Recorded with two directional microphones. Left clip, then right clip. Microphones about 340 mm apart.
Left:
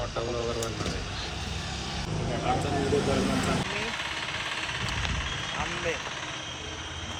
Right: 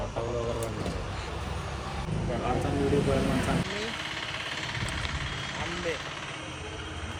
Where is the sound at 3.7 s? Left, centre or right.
Left.